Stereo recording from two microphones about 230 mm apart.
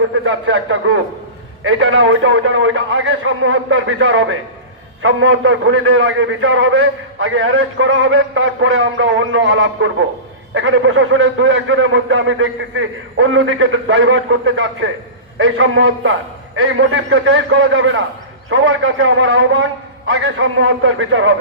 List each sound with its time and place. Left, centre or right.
0.3 s a man's voice: right